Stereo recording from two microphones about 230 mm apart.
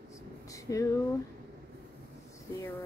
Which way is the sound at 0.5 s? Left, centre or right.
Centre.